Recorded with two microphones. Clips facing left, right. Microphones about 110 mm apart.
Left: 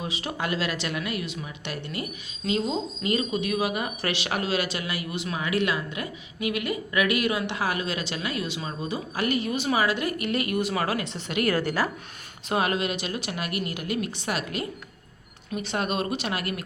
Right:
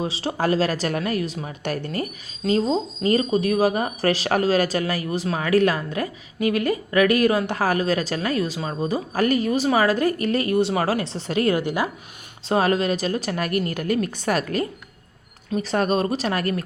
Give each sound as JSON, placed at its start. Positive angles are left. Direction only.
{"t": 0.0, "sound": "speech", "side_deg": -30}
{"t": 11.5, "sound": "a woman's voice", "side_deg": -15}
{"t": 12.5, "sound": "speech", "side_deg": -35}